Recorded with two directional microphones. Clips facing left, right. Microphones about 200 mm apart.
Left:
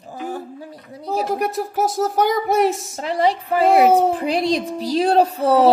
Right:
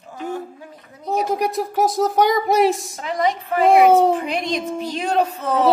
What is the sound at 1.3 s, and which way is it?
Speech, centre (ahead or behind).